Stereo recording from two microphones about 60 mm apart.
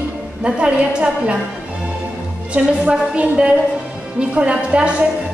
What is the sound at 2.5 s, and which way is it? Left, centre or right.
A woman's voice, centre.